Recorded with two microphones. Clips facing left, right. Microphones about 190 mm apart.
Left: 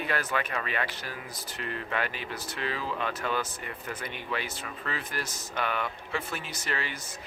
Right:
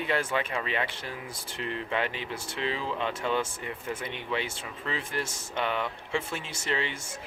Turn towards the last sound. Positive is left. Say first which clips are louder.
# right 3 dB
turn(degrees=-25)  # may be behind; listen again after turning